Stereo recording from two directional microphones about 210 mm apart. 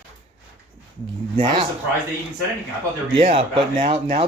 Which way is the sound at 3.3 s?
25° right (ahead or behind).